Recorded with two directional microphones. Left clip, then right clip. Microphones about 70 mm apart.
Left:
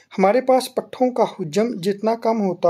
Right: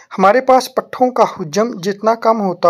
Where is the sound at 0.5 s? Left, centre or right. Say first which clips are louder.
Right 6 dB; centre.